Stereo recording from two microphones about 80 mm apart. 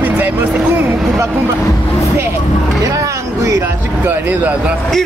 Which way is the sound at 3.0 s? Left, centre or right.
Right.